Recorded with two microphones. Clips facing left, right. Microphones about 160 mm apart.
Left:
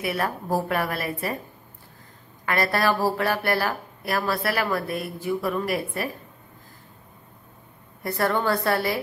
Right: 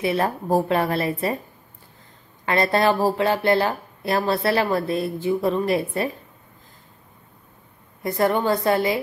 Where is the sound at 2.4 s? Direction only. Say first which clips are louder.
Right 4 dB; 25° right (ahead or behind).